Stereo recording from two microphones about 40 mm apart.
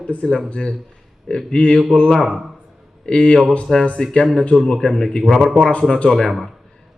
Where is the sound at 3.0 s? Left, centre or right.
Left.